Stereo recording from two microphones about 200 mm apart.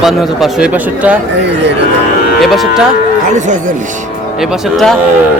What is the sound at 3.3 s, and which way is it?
Speech, 40° right (ahead or behind).